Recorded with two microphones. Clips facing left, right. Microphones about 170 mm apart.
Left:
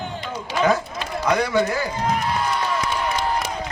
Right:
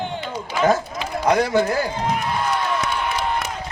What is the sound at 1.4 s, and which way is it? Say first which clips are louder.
Speech: right 1 dB; 55° right (ahead or behind).